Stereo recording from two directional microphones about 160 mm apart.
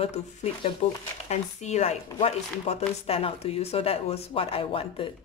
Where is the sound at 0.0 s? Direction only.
45° left (ahead or behind).